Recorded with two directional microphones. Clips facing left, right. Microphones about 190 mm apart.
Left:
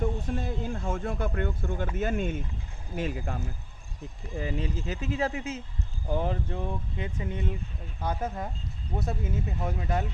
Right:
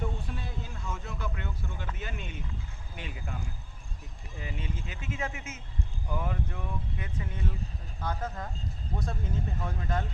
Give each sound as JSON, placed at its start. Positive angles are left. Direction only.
{"t": 0.2, "sound": "speech", "side_deg": 45}
{"t": 4.4, "sound": "speech", "side_deg": 40}